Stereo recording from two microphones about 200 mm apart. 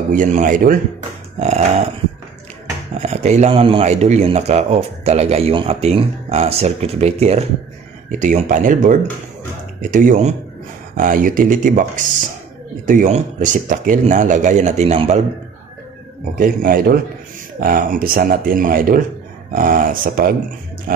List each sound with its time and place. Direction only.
0.1 s a man's voice: 40° right (ahead or behind)
3.0 s a man's voice: 35° right (ahead or behind)
16.3 s speech: 45° right (ahead or behind)